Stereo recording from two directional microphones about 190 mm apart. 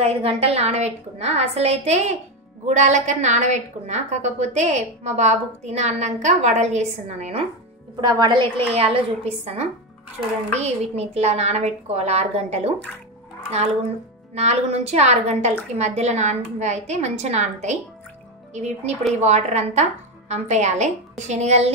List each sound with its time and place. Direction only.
0.0 s a woman's voice: 30° right (ahead or behind)
8.0 s a woman's voice: 25° right (ahead or behind)
14.3 s a woman's voice: 35° right (ahead or behind)
19.2 s a woman's voice: 35° right (ahead or behind)